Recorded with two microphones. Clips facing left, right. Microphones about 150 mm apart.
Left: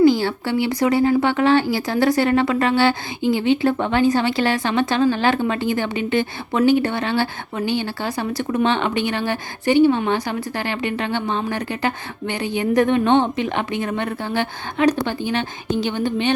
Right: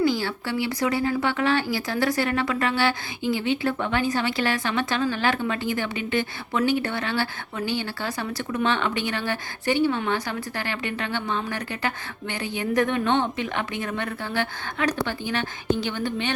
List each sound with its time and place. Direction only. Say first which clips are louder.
0.0 s speech: left 8 dB; 25° left (ahead or behind)